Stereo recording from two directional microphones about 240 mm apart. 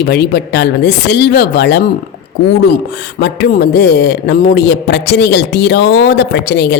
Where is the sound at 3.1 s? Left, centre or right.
Left.